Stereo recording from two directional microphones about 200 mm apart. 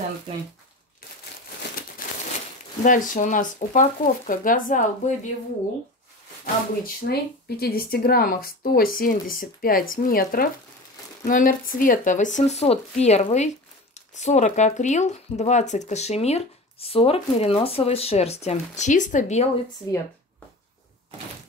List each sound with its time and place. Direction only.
2.8 s speech: 40° left (ahead or behind)
6.4 s speech: 50° left (ahead or behind); by 19.5 s 35° left (ahead or behind)
19.9 s speech: 15° left (ahead or behind)